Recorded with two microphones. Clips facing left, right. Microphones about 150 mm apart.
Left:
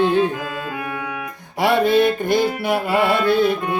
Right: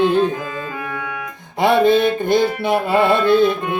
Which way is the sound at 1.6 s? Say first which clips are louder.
Right 2 dB; 20° right (ahead or behind).